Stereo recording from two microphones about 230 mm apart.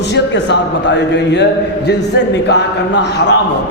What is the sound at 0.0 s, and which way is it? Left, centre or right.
A man's voice, left.